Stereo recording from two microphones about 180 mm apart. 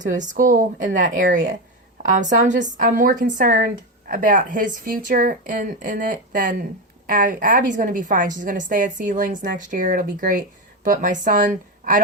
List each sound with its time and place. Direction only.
0.0 s speech: 45° right (ahead or behind)